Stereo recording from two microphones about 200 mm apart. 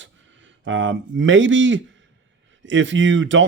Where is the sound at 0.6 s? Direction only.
70° right (ahead or behind).